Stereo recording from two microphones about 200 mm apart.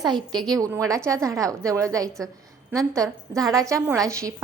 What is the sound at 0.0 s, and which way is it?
A woman's voice, 20° right (ahead or behind).